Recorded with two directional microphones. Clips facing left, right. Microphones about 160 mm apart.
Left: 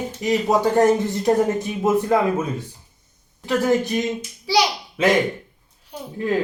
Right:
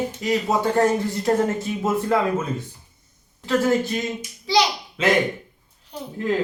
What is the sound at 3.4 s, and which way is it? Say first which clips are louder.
Speech: left 1 dB; 15° left (ahead or behind).